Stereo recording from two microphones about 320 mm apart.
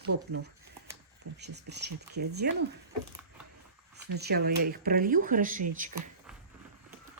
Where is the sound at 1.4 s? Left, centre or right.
Right.